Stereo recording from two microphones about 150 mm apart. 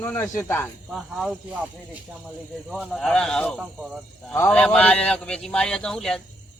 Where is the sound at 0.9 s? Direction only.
5° right (ahead or behind).